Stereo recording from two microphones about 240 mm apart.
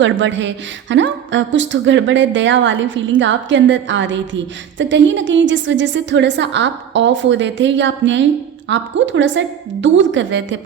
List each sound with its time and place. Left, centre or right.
0.0 s a woman's voice: right